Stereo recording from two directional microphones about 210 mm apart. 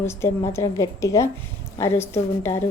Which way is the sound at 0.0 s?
10° left (ahead or behind).